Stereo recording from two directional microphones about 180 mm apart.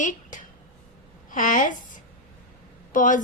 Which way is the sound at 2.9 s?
45° left (ahead or behind).